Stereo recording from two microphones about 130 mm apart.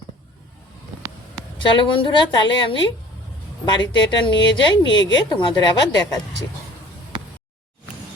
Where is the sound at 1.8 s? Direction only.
40° left (ahead or behind).